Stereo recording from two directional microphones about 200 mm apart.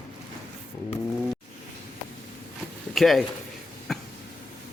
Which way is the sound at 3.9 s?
Centre (ahead or behind).